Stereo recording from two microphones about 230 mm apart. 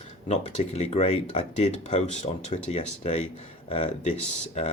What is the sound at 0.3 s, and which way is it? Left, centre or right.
Speech, left.